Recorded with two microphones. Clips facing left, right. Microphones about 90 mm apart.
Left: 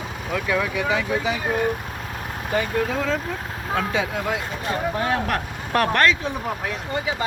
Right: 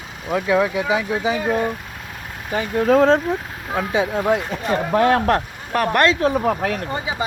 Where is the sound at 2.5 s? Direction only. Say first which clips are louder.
Right 1 dB; 20° right (ahead or behind).